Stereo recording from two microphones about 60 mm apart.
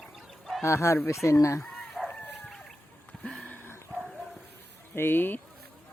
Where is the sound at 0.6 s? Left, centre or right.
Left.